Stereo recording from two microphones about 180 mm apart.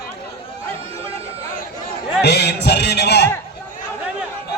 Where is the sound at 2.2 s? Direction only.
65° left (ahead or behind).